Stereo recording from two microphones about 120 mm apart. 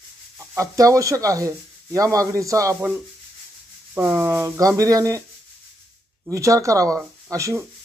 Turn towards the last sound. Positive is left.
turn(degrees=-25)  # may be behind; listen again after turning